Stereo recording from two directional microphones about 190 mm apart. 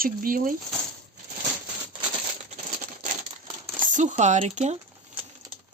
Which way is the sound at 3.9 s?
40° right (ahead or behind).